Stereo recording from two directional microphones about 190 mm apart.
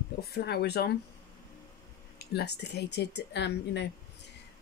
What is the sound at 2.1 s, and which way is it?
Speech, 60° left (ahead or behind).